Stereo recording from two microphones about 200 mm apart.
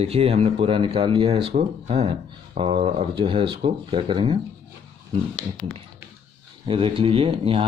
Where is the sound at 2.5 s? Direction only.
35° right (ahead or behind).